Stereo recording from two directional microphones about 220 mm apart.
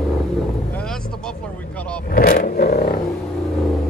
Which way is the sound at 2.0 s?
40° left (ahead or behind).